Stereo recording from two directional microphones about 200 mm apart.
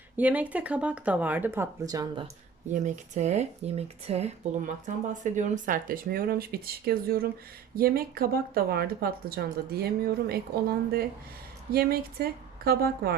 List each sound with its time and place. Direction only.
0.2 s speech: 5° right (ahead or behind)
2.7 s speech: 35° right (ahead or behind)